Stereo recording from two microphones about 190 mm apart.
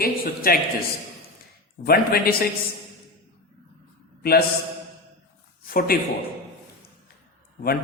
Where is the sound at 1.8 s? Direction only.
50° left (ahead or behind).